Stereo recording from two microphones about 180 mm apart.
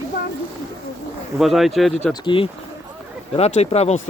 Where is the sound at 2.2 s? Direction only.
30° left (ahead or behind).